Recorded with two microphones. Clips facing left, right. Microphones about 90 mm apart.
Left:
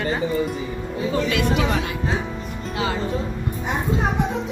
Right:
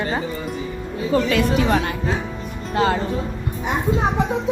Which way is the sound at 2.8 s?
55° right (ahead or behind).